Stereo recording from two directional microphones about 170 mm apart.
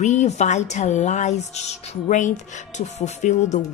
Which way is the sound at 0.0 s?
45° left (ahead or behind).